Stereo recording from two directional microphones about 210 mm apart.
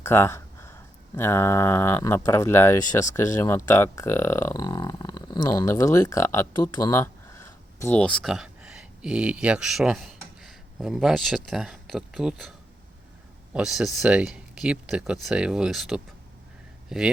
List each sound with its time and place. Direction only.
0.0 s speech: 10° left (ahead or behind)